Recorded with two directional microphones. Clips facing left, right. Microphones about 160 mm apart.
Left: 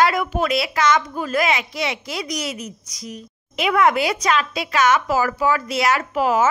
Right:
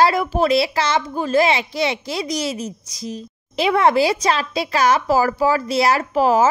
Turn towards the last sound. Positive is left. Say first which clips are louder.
# right 3 dB
turn(degrees=-35)  # may be behind; listen again after turning